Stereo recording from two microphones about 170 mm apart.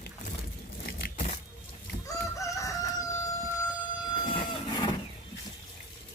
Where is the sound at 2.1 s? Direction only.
20° left (ahead or behind).